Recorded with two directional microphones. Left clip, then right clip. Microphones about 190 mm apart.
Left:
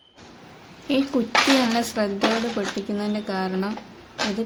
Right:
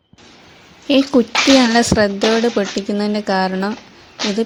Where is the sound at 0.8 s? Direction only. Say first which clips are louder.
Right 9 dB; 45° right (ahead or behind).